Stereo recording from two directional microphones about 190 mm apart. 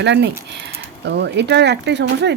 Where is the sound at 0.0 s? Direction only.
65° right (ahead or behind).